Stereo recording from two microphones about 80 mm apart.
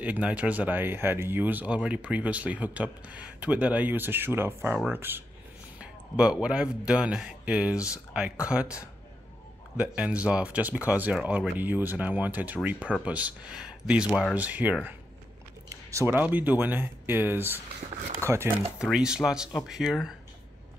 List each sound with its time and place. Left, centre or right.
0.0 s speech: centre
5.8 s speech: centre
15.7 s a sound: right
16.1 s speech: right
18.8 s speech: centre